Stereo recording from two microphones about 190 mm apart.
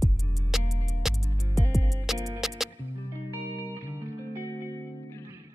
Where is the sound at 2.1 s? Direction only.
15° right (ahead or behind).